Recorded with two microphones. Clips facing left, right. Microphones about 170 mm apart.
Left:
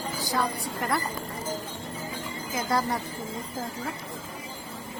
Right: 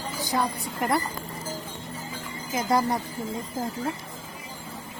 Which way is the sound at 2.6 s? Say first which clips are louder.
Right 3 dB; 20° right (ahead or behind).